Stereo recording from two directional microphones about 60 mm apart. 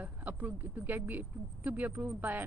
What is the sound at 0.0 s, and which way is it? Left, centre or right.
A woman's voice, right.